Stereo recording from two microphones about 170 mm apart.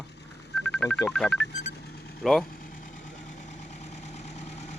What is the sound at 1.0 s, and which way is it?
Speech, 5° left (ahead or behind).